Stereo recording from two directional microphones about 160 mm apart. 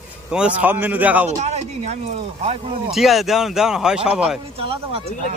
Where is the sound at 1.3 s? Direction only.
45° right (ahead or behind).